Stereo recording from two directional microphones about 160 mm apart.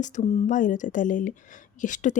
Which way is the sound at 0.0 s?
50° left (ahead or behind).